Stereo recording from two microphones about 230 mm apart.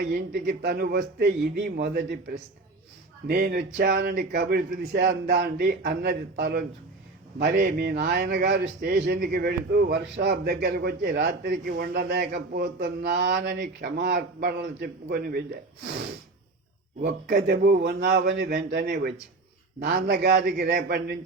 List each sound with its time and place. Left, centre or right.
0.1 s speech: right
3.2 s speech: right
17.0 s speech: right